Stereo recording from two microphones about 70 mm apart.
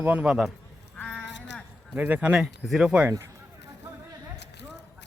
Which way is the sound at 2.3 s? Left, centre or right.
Centre.